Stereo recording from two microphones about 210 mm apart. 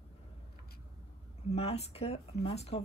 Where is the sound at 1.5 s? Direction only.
30° left (ahead or behind).